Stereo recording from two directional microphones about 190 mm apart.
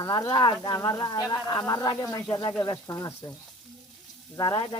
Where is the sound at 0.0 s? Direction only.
20° left (ahead or behind).